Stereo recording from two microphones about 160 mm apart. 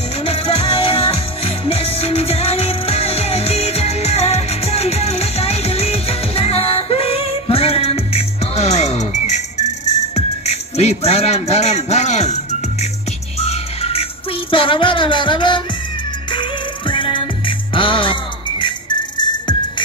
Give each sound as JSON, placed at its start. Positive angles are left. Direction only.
{"t": 0.2, "sound": "music", "side_deg": 40}
{"t": 13.4, "sound": "music", "side_deg": 40}